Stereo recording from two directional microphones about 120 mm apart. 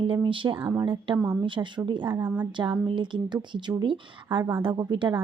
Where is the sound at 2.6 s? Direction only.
40° right (ahead or behind).